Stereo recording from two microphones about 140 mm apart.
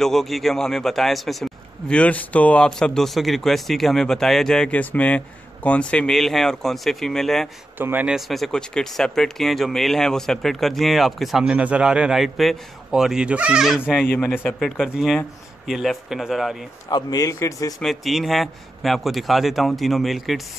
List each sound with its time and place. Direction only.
0.0 s a man's voice: centre (ahead or behind)
7.8 s speech: 10° right (ahead or behind)
8.3 s a man's voice: 5° left (ahead or behind)
14.1 s a man's voice: 10° left (ahead or behind)
14.6 s a man's voice: centre (ahead or behind)
16.9 s speech: 25° left (ahead or behind)
17.7 s a man's voice: centre (ahead or behind)